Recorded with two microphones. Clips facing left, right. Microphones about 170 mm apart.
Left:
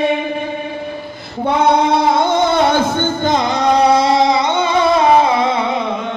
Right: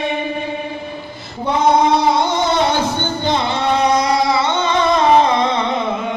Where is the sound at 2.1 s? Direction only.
55° left (ahead or behind); by 5.8 s 5° left (ahead or behind).